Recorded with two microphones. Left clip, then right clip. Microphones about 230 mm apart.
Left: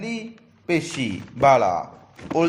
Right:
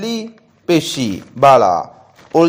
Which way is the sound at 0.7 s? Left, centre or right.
Right.